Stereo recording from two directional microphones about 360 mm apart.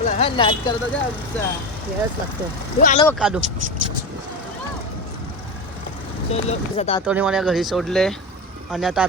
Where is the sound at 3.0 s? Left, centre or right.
Centre.